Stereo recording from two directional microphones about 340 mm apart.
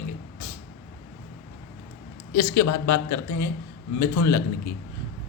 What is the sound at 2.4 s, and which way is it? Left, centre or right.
A man's voice, left.